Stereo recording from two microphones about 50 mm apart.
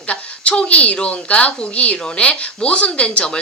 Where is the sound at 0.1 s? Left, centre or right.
Left.